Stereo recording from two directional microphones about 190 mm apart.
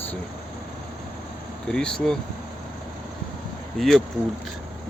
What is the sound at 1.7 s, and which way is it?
Speech, 5° left (ahead or behind).